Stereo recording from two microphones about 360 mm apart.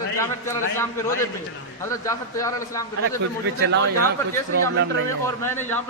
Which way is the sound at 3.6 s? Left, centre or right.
Right.